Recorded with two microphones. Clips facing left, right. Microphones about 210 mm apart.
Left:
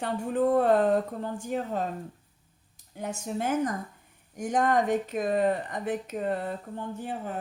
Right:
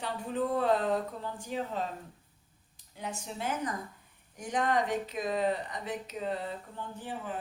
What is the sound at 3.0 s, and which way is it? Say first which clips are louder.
A woman's voice: left 6 dB; 50° left (ahead or behind).